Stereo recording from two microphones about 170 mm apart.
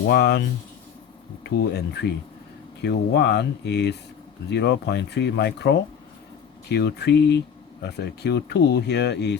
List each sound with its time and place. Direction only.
0.1 s speech: 70° left (ahead or behind)
1.5 s speech: 70° left (ahead or behind)
2.8 s speech: 85° left